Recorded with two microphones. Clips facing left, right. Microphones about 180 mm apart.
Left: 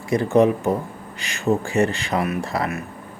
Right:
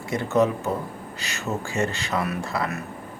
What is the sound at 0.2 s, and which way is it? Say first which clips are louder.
Speech: left 4 dB; 30° left (ahead or behind).